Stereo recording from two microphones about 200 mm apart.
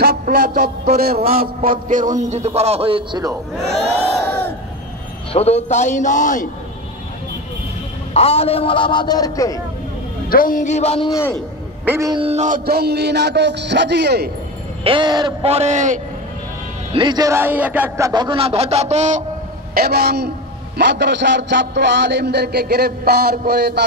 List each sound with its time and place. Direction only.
0.0 s a man's voice: 50° right (ahead or behind); by 3.3 s 20° right (ahead or behind)
4.0 s crowd: 5° left (ahead or behind)
5.3 s a man's voice: 30° left (ahead or behind)
8.1 s a man's voice: 30° left (ahead or behind)
10.3 s a man's voice: 45° left (ahead or behind)
11.1 s a man's voice: 15° left (ahead or behind)
11.9 s a man's voice: 20° right (ahead or behind); by 14.3 s 55° right (ahead or behind)
14.8 s speech: 25° right (ahead or behind)
16.9 s speech: 20° right (ahead or behind)
19.7 s a man's voice: 50° right (ahead or behind)